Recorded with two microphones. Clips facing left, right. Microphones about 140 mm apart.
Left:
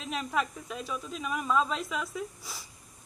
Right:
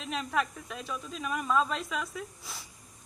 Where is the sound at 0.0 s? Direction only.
Centre (ahead or behind).